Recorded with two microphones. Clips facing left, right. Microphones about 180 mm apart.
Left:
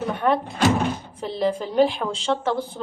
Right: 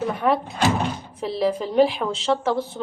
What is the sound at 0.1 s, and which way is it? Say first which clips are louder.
Door: left 1 dB; centre (ahead or behind).